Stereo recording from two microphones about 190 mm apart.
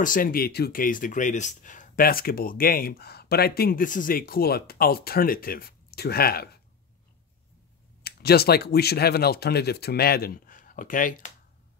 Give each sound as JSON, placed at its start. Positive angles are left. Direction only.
{"t": 0.0, "sound": "speech", "side_deg": 45}
{"t": 8.0, "sound": "speech", "side_deg": 55}